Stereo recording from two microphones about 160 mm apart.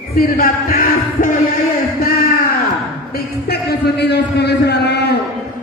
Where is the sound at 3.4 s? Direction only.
90° left.